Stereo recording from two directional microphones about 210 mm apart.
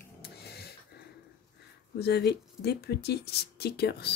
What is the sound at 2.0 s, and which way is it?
Speech, 55° left (ahead or behind).